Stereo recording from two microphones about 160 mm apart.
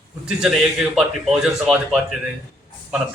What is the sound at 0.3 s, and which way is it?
A man's voice, 5° right (ahead or behind).